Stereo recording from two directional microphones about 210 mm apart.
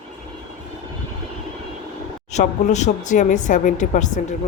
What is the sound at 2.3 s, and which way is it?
Speech, 35° left (ahead or behind).